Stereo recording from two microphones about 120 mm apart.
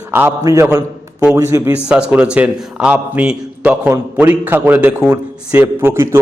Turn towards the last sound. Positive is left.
turn(degrees=-20)  # may be behind; listen again after turning